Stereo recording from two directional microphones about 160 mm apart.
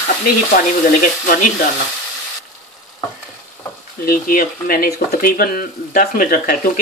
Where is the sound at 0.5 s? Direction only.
60° left (ahead or behind).